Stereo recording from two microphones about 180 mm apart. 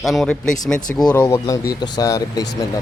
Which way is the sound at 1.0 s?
15° left (ahead or behind).